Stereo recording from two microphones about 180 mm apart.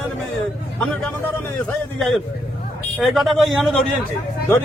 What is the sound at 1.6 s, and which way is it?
A man's voice, centre (ahead or behind).